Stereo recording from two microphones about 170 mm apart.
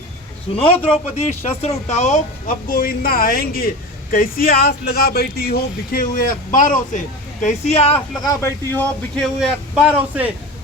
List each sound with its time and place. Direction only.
0.5 s a man's voice: 30° left (ahead or behind)
1.2 s speech: 40° left (ahead or behind)
8.2 s speech: 20° left (ahead or behind)
9.1 s speech: centre (ahead or behind)